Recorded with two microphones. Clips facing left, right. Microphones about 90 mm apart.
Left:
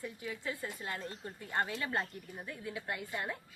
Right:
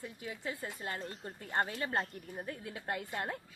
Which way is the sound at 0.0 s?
30° right (ahead or behind).